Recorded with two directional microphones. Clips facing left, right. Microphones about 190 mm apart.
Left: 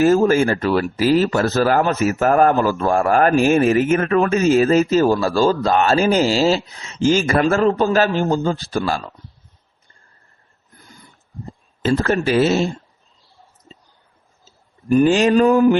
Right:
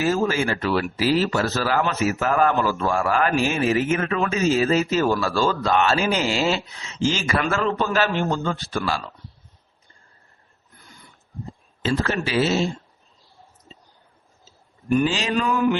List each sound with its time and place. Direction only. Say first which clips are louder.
0.0 s speech: left 8 dB; 50° left (ahead or behind)
11.8 s speech: left 5 dB; 50° left (ahead or behind)
14.8 s speech: left 6 dB; 35° left (ahead or behind)
15.1 s speech: left 10 dB; 50° left (ahead or behind)